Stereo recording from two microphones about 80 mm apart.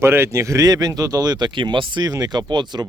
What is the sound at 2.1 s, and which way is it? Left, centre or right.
Speech, right.